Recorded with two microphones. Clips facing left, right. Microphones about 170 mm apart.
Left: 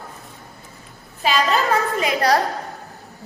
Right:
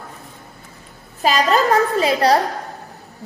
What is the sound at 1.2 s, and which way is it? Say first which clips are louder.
A woman's voice: right 3 dB; 40° right (ahead or behind).